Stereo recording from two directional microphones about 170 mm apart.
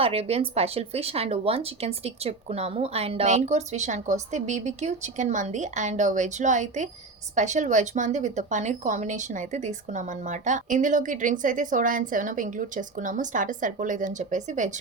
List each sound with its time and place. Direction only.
0.0 s a woman's voice: 35° right (ahead or behind)